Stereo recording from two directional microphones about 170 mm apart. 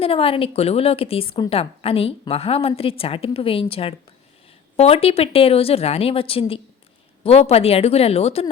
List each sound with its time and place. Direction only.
0.0 s a woman's voice: 35° left (ahead or behind)